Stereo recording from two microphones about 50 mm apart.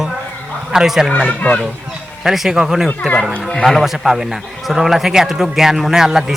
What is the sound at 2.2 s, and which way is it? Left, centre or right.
A man's voice, centre.